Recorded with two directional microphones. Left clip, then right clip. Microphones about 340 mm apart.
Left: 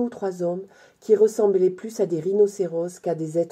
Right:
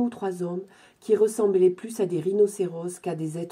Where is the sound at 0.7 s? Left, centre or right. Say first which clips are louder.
Left 2 dB; centre.